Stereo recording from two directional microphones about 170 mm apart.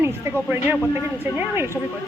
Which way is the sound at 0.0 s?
15° right (ahead or behind).